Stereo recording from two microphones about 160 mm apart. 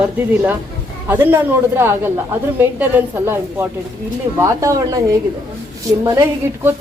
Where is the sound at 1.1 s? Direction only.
10° right (ahead or behind).